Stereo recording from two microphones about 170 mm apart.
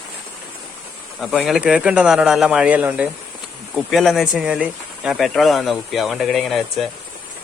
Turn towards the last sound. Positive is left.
turn(degrees=0)  # may be behind; listen again after turning